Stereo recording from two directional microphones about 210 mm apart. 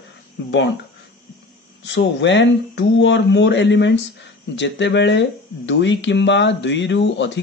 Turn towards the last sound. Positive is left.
turn(degrees=60)  # may be behind; listen again after turning